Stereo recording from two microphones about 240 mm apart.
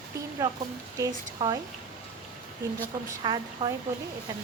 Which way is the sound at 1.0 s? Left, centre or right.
Centre.